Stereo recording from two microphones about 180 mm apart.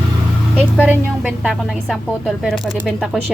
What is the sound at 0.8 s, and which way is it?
Speech, 5° right (ahead or behind).